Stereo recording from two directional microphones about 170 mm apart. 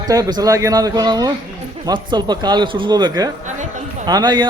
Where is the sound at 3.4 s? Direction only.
45° right (ahead or behind).